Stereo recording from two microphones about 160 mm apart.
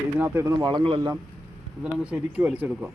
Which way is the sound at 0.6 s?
30° right (ahead or behind).